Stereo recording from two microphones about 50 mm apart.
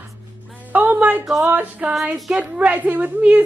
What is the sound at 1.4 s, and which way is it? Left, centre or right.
Music, right.